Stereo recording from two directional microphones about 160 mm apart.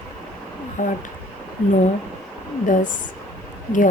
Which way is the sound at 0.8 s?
55° left (ahead or behind).